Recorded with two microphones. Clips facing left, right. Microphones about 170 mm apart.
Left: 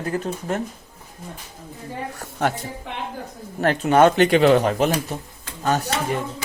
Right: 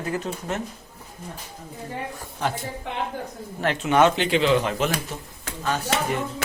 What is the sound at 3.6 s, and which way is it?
Speech, 45° left (ahead or behind).